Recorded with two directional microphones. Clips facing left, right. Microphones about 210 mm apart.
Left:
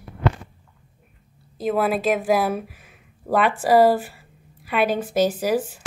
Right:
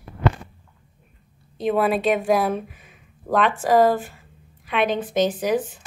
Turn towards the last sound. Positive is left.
turn(degrees=5)  # may be behind; listen again after turning